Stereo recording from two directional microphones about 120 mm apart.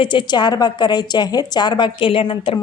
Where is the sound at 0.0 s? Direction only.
40° left (ahead or behind).